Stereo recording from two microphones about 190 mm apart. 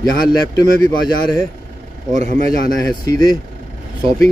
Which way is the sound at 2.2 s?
35° right (ahead or behind).